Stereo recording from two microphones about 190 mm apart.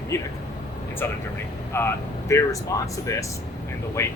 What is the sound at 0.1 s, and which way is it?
Speech, 15° left (ahead or behind).